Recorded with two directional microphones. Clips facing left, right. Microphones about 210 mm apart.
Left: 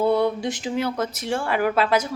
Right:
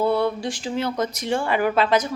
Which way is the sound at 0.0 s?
20° left (ahead or behind).